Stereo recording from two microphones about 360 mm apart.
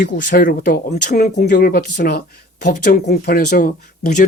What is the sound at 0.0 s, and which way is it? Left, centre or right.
Speech, left.